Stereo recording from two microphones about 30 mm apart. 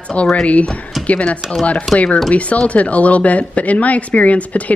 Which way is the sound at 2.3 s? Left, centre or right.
Left.